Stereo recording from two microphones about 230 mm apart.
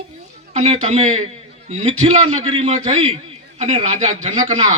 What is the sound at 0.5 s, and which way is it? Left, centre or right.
A man's voice, right.